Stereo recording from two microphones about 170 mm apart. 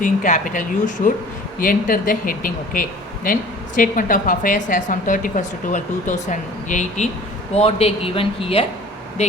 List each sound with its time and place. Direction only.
0.0 s a woman's voice: 50° left (ahead or behind); by 8.6 s 35° left (ahead or behind)